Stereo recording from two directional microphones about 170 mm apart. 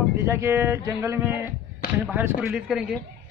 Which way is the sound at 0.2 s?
15° right (ahead or behind).